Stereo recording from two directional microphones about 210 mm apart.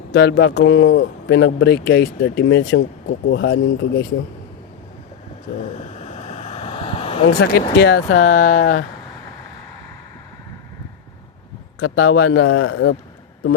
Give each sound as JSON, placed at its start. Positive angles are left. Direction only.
{"t": 0.1, "sound": "speech", "side_deg": 50}
{"t": 5.7, "sound": "a sound", "side_deg": 30}
{"t": 7.3, "sound": "speech", "side_deg": 50}
{"t": 7.8, "sound": "speech", "side_deg": 60}
{"t": 8.2, "sound": "speech", "side_deg": 35}
{"t": 11.8, "sound": "speech", "side_deg": 75}